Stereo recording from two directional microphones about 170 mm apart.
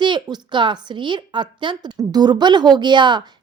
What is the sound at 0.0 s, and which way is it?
A woman's voice, 25° right (ahead or behind).